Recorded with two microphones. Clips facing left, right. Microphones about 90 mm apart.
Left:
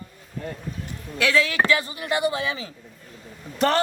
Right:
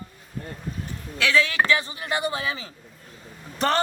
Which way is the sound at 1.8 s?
30° right (ahead or behind).